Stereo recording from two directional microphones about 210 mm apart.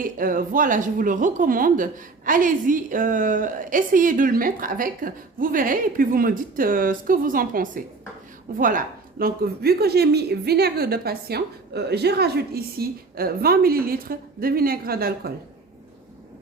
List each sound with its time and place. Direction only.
0.0 s a woman's voice: 40° right (ahead or behind)